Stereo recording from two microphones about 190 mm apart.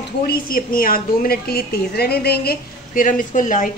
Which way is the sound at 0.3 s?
50° left (ahead or behind).